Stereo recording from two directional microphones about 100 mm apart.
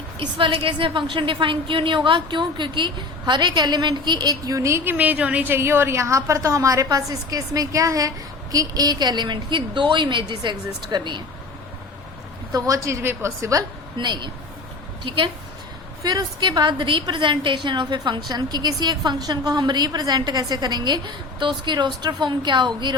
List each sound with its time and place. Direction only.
0.2 s a woman's voice: 60° right (ahead or behind); by 4.9 s 30° right (ahead or behind)
4.9 s a woman's voice: 15° right (ahead or behind); by 11.2 s 50° right (ahead or behind)
12.5 s a woman's voice: 35° right (ahead or behind)
13.9 s a woman's voice: 50° right (ahead or behind)
16.0 s a woman's voice: 40° right (ahead or behind)